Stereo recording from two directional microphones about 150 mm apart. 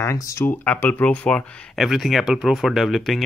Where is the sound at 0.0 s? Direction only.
20° left (ahead or behind).